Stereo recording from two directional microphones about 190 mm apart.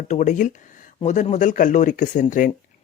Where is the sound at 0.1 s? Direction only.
40° left (ahead or behind).